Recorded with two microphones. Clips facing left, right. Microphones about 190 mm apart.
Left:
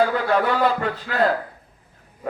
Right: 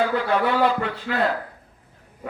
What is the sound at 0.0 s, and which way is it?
A man's voice, 40° left (ahead or behind).